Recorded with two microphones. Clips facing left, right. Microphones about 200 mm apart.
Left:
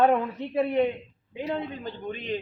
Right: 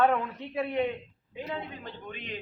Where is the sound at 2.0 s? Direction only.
35° left (ahead or behind).